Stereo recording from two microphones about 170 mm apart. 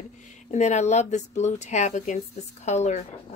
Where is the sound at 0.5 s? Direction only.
40° left (ahead or behind).